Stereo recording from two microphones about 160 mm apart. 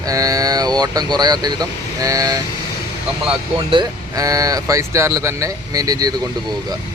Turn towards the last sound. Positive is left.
turn(degrees=-20)  # may be behind; listen again after turning